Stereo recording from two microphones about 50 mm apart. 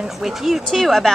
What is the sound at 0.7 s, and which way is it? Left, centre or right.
Speech, centre.